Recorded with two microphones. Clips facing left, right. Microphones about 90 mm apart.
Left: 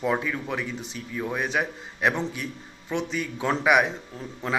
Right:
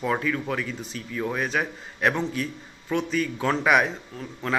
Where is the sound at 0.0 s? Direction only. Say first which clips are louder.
Right 1 dB; 15° left (ahead or behind).